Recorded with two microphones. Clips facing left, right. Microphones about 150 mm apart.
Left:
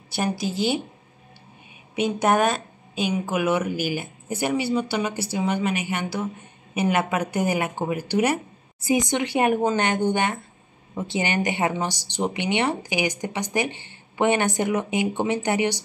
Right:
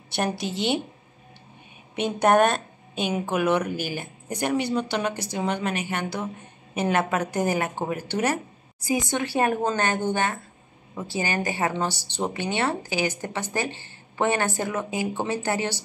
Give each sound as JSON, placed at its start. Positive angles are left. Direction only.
{"t": 0.1, "sound": "a woman's voice", "side_deg": 0}
{"t": 2.0, "sound": "speech", "side_deg": 5}